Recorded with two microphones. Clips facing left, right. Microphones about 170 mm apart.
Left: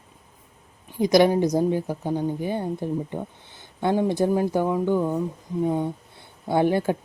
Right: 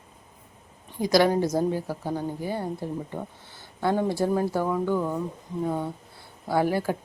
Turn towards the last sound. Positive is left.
turn(degrees=25)  # may be behind; listen again after turning